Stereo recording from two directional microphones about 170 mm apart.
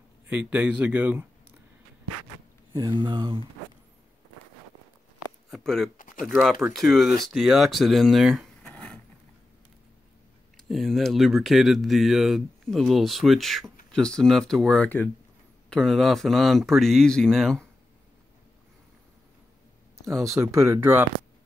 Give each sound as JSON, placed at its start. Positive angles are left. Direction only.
{"t": 0.3, "sound": "speech", "side_deg": -10}
{"t": 2.7, "sound": "speech", "side_deg": -25}
{"t": 5.5, "sound": "speech", "side_deg": 0}
{"t": 5.9, "sound": "a sound", "side_deg": 55}
{"t": 6.2, "sound": "speech", "side_deg": 0}
{"t": 10.7, "sound": "speech", "side_deg": 0}
{"t": 20.3, "sound": "speech", "side_deg": -15}